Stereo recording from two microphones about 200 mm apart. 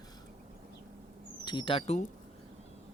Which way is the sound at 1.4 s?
25° left (ahead or behind).